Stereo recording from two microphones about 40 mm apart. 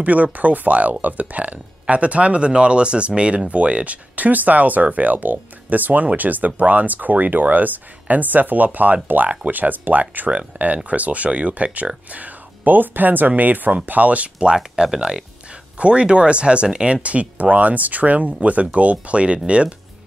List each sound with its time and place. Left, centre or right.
0.0 s speech: right
14.4 s speech: centre